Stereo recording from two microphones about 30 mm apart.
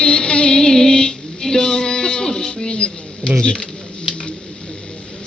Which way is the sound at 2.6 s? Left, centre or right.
Left.